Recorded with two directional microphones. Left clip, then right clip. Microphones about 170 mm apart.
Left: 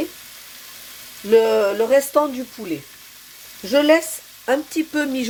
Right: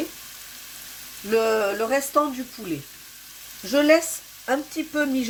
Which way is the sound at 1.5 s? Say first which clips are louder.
Left 6 dB; 45° left (ahead or behind).